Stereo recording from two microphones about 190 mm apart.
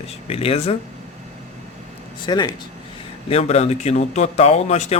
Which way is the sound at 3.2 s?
30° left (ahead or behind).